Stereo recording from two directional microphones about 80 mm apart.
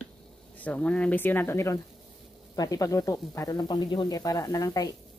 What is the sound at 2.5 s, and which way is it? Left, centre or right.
Speech, left.